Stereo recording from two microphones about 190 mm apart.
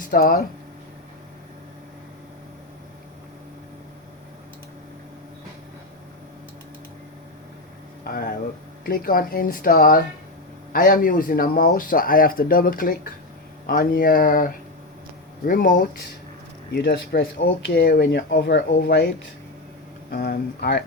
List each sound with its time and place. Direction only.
0.0 s speech: 45° left (ahead or behind)
8.0 s speech: 50° left (ahead or behind)
16.7 s speech: 60° left (ahead or behind)